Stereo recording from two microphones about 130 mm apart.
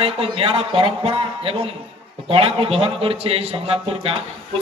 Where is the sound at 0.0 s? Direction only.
50° right (ahead or behind).